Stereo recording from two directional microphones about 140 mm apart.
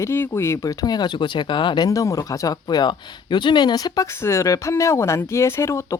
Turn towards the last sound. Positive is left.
turn(degrees=20)  # may be behind; listen again after turning